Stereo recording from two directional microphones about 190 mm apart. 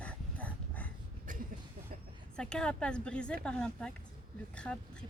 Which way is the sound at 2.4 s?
5° left (ahead or behind).